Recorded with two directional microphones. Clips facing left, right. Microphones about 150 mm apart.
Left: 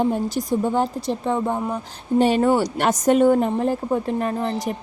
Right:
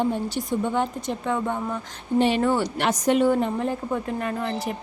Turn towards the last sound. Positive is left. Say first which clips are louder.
# left 4 dB
turn(degrees=30)  # may be behind; listen again after turning